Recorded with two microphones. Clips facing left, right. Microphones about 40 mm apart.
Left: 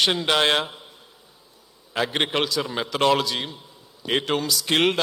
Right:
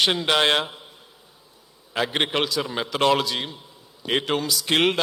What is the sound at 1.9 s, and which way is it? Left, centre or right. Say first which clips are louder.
A man's voice: even; centre.